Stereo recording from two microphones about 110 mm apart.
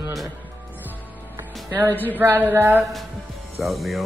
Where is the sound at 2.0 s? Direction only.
15° right (ahead or behind).